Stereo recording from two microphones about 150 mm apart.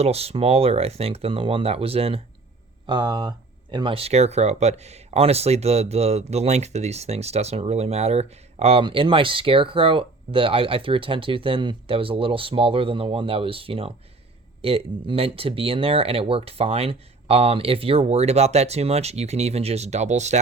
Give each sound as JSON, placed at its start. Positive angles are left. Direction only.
{"t": 0.0, "sound": "speech", "side_deg": -45}
{"t": 2.8, "sound": "speech", "side_deg": -30}